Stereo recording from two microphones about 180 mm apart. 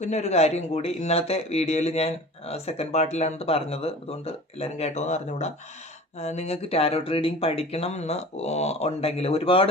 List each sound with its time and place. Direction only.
0.0 s speech: 40° left (ahead or behind)